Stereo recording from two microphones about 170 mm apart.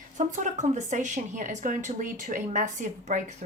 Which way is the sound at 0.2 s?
45° right (ahead or behind).